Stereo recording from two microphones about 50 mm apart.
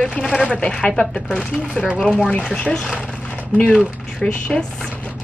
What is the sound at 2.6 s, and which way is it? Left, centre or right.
Speech, centre.